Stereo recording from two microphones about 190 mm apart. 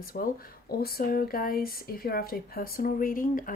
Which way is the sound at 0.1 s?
50° left (ahead or behind).